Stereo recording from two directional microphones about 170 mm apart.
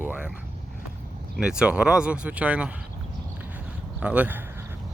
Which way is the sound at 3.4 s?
10° right (ahead or behind).